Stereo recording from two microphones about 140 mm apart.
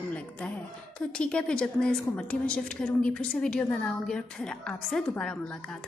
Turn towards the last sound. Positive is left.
turn(degrees=5)  # may be behind; listen again after turning